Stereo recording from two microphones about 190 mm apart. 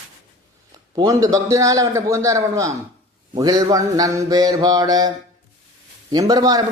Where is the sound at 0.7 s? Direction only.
20° right (ahead or behind).